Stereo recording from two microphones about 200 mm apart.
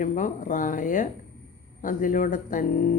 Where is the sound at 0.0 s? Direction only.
40° left (ahead or behind).